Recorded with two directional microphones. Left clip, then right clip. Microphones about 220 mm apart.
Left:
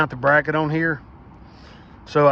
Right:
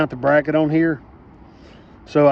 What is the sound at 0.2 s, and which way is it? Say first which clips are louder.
Speech: right 2 dB; 15° left (ahead or behind).